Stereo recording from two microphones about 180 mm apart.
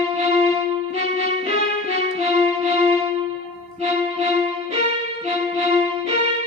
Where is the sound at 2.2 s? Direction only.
35° right (ahead or behind).